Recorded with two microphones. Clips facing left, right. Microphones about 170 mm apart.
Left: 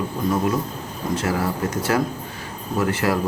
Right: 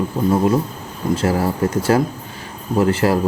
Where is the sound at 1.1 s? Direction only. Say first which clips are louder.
Right 4 dB; 30° right (ahead or behind).